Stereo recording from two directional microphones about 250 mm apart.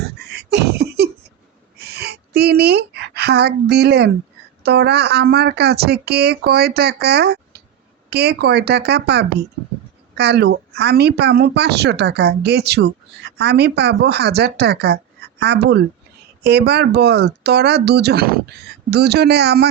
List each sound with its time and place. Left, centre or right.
0.0 s beatboxing: right
1.8 s a sound: right
4.6 s speech: right